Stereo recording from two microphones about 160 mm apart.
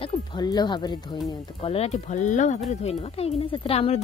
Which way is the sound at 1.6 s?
35° left (ahead or behind).